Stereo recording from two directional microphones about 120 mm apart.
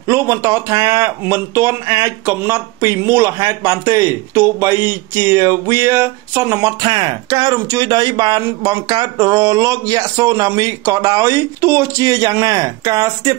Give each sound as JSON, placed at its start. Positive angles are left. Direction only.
{"t": 0.1, "sound": "speech", "side_deg": -25}